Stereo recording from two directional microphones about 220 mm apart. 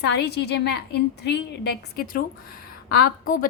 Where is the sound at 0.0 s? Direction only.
50° left (ahead or behind).